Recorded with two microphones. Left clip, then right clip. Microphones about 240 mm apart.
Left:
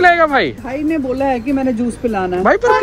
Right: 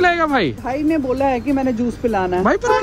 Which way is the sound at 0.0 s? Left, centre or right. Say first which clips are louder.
Left 5 dB; centre.